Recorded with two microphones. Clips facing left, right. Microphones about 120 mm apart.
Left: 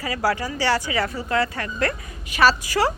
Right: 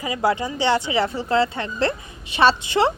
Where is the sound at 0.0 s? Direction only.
20° right (ahead or behind).